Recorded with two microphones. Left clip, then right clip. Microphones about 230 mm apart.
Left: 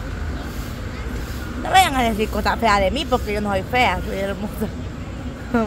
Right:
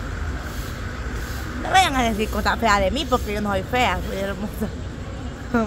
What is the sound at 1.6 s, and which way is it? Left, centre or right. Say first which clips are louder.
Speech: left 2 dB; centre.